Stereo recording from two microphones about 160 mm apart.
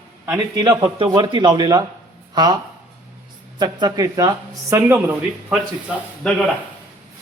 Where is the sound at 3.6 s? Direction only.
25° right (ahead or behind); by 6.0 s 5° right (ahead or behind).